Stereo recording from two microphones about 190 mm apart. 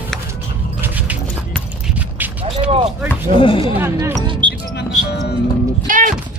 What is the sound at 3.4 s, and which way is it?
Speech, 25° left (ahead or behind).